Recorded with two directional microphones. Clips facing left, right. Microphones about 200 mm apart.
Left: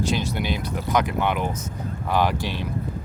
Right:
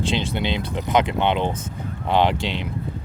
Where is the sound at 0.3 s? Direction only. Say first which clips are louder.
Right 2 dB; 25° right (ahead or behind).